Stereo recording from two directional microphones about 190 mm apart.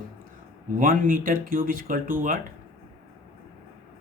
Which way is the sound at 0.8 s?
45° right (ahead or behind).